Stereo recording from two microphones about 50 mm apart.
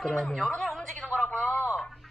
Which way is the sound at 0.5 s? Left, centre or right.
Centre.